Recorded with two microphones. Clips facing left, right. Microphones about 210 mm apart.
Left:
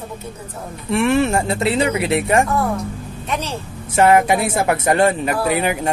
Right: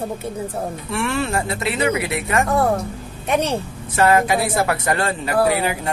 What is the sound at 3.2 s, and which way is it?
Speech, 60° right (ahead or behind).